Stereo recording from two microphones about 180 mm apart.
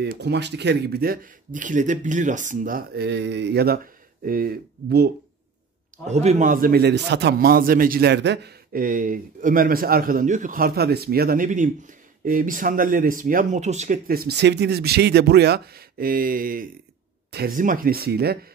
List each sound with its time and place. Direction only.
0.0 s speech: 65° right (ahead or behind)
6.0 s a man's voice: 40° right (ahead or behind)
14.0 s speech: 60° right (ahead or behind)